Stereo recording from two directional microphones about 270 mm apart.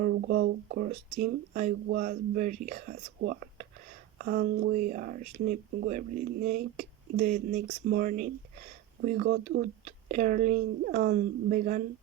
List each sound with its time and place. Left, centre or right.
0.0 s speech: right